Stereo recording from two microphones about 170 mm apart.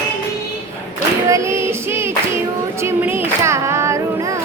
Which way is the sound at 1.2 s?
15° right (ahead or behind).